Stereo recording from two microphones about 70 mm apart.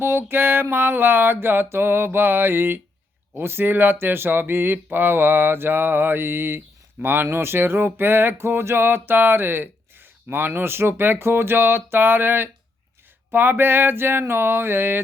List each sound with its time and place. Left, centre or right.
0.0 s music: right